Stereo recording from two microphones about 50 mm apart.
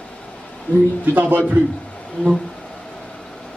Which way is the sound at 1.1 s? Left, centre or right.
Right.